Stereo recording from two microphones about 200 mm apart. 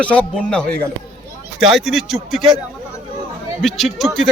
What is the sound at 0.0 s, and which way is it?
A man's voice, 5° left (ahead or behind).